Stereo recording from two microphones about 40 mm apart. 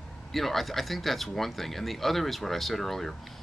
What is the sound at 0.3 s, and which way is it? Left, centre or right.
Speech, centre.